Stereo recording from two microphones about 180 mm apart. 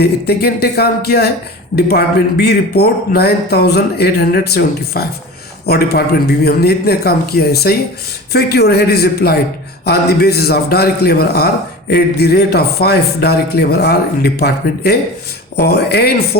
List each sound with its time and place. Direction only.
0.0 s a man's voice: 65° left (ahead or behind)